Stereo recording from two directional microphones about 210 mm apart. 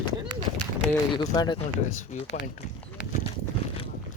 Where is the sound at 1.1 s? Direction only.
20° left (ahead or behind).